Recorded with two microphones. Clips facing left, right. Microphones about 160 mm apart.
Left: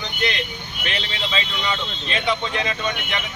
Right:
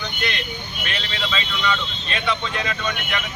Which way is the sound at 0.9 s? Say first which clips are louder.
Even; 20° left (ahead or behind).